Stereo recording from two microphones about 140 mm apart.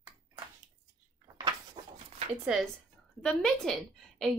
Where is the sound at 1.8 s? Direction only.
35° right (ahead or behind).